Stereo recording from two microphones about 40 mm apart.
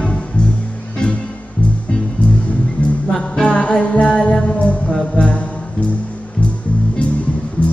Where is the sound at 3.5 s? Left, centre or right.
Left.